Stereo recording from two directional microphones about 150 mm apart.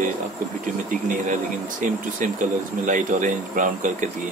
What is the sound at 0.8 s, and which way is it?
Speech, 65° right (ahead or behind).